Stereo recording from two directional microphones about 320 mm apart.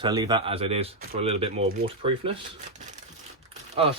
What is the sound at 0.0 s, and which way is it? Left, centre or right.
Speech, centre.